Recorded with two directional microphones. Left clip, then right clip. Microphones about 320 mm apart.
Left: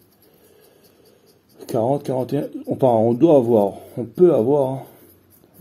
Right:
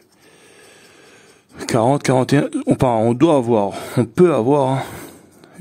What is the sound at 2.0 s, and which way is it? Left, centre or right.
Speech, right.